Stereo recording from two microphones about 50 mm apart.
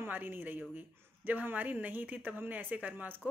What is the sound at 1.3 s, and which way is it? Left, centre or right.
Speech, right.